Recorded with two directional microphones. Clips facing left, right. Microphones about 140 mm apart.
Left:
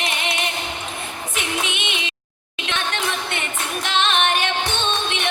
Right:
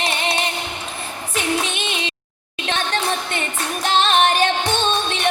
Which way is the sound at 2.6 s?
35° right (ahead or behind).